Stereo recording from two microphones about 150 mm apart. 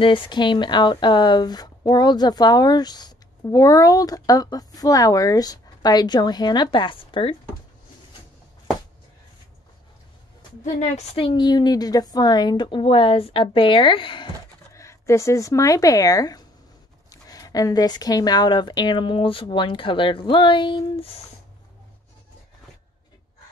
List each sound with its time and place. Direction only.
0.0 s speech: 30° left (ahead or behind)
10.6 s speech: 45° left (ahead or behind)
14.7 s speech: 20° left (ahead or behind)